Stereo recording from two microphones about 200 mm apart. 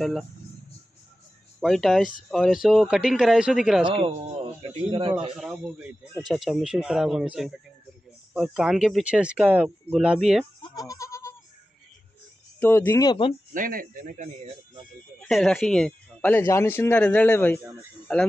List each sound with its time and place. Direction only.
0.0 s speech: centre (ahead or behind)
1.6 s speech: centre (ahead or behind)
3.8 s speech: 30° right (ahead or behind)
5.3 s speech: 5° right (ahead or behind)
10.6 s goat: 20° left (ahead or behind)
12.5 s speech: 10° left (ahead or behind)
13.5 s speech: 45° right (ahead or behind)
15.1 s speech: centre (ahead or behind)